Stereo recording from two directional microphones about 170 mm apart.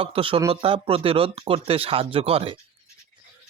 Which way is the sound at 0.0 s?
30° right (ahead or behind).